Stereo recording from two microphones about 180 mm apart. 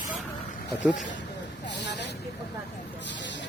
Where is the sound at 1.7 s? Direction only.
70° left (ahead or behind).